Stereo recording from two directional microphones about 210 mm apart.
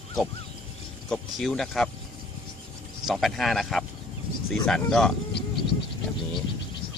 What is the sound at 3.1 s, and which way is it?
Speech, centre (ahead or behind).